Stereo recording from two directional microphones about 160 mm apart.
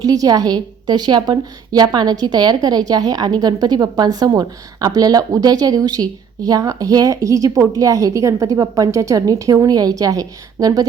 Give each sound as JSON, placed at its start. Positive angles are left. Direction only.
{"t": 0.0, "sound": "a woman's voice", "side_deg": -25}